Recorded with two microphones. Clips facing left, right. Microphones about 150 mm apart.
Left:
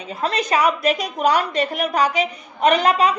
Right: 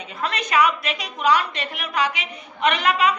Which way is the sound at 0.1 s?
35° left (ahead or behind).